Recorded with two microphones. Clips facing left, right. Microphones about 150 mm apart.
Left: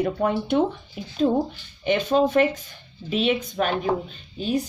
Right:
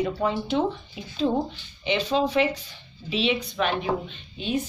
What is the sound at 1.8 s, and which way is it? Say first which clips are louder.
Speech: left 4 dB; 50° left (ahead or behind).